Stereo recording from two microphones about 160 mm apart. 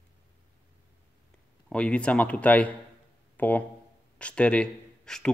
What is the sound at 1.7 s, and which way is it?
A man's voice, 5° left (ahead or behind).